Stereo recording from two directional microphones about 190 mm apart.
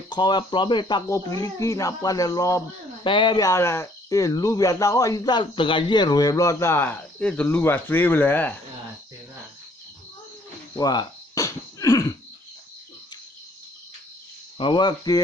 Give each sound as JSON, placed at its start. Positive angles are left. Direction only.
{"t": 0.1, "sound": "speech", "side_deg": 25}
{"t": 10.8, "sound": "a sound", "side_deg": 20}
{"t": 14.6, "sound": "speech", "side_deg": 25}